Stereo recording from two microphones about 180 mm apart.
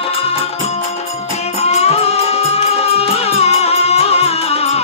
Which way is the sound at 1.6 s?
35° left (ahead or behind).